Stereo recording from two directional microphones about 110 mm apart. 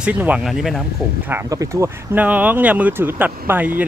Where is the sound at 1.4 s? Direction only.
30° right (ahead or behind).